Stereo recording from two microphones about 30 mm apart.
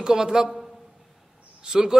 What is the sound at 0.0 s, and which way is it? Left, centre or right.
Speech, right.